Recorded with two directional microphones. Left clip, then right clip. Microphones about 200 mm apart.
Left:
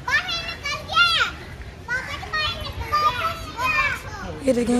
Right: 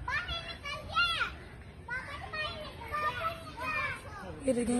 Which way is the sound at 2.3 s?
50° left (ahead or behind).